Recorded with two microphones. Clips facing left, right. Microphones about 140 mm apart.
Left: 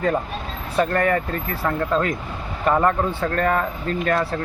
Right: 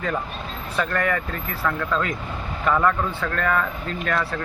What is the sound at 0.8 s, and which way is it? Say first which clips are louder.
Speech: left 5 dB; 35° left (ahead or behind).